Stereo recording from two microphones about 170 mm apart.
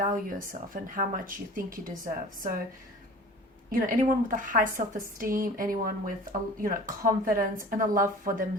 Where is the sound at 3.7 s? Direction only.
50° right (ahead or behind).